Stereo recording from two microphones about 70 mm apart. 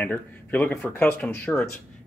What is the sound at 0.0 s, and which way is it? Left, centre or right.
Speech, left.